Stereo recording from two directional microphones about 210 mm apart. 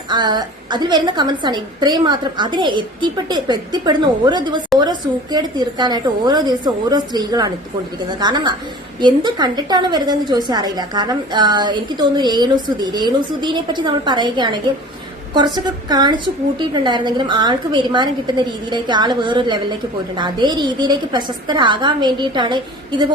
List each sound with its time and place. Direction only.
0.1 s a woman's voice: 20° right (ahead or behind)